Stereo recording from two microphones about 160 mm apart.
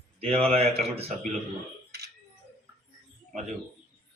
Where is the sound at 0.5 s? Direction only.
40° right (ahead or behind).